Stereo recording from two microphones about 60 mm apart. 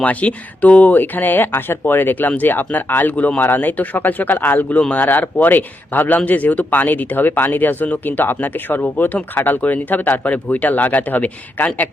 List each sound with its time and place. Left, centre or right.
0.0 s speech: left